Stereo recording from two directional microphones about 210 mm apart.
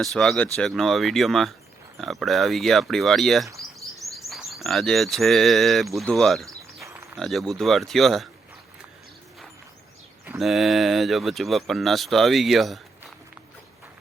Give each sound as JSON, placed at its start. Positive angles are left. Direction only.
{"t": 0.0, "sound": "speech", "side_deg": 0}
{"t": 10.2, "sound": "speech", "side_deg": 0}